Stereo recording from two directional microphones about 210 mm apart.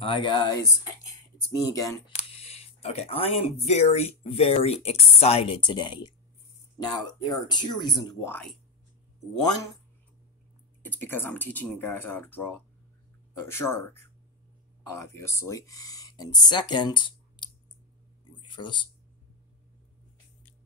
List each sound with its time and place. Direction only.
0.0 s speech: 25° left (ahead or behind)
2.1 s speech: 30° left (ahead or behind); by 8.5 s 10° left (ahead or behind)
10.8 s speech: 10° left (ahead or behind)